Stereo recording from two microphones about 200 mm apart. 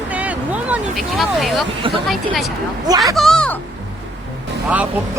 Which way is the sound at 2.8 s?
20° right (ahead or behind).